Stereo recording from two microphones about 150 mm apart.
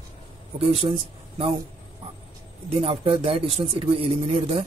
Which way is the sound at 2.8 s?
40° right (ahead or behind).